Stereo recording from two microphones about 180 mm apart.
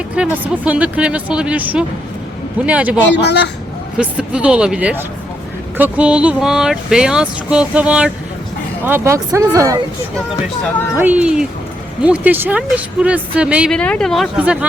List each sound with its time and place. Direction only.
0.2 s speech: 10° right (ahead or behind)
3.2 s speech: 70° left (ahead or behind)
3.9 s a sound: 5° right (ahead or behind)
8.8 s speech: 15° right (ahead or behind)
10.9 s speech: 10° right (ahead or behind)
13.7 s a sound: 5° left (ahead or behind)